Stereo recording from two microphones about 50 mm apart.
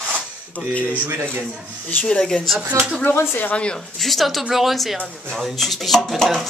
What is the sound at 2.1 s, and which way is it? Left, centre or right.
Speech, centre.